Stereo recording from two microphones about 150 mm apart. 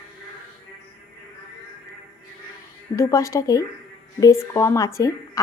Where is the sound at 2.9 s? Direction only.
20° left (ahead or behind).